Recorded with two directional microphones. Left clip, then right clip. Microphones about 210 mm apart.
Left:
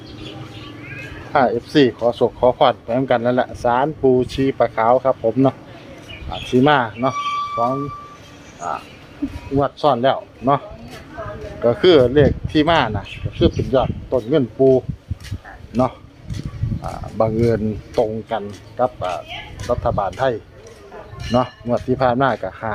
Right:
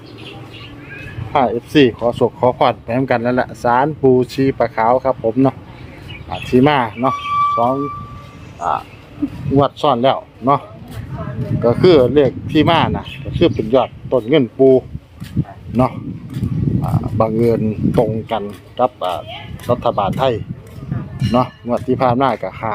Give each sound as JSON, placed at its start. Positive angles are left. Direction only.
{"t": 1.3, "sound": "speech", "side_deg": -10}
{"t": 9.6, "sound": "speech", "side_deg": -30}
{"t": 11.6, "sound": "speech", "side_deg": -15}
{"t": 15.7, "sound": "a man's voice", "side_deg": -40}
{"t": 16.8, "sound": "speech", "side_deg": -15}